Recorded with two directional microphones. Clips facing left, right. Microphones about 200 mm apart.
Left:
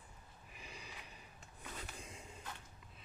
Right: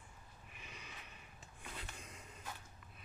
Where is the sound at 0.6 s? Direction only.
35° left (ahead or behind).